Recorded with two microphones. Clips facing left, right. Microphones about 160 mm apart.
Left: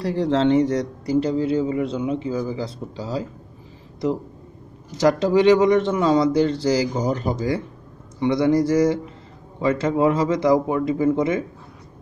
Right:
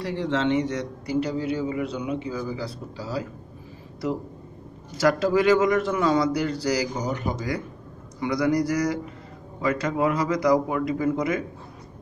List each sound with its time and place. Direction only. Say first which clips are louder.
0.0 s a man's voice: left 5 dB; 35° left (ahead or behind)
4.9 s a man's voice: left 3 dB; 20° left (ahead or behind)